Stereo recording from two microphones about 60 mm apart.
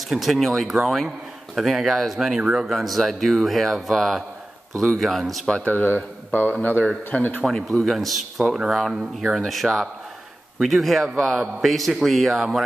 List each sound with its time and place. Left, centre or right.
0.1 s speech: centre
2.6 s speech: centre
5.7 s speech: left
7.7 s speech: centre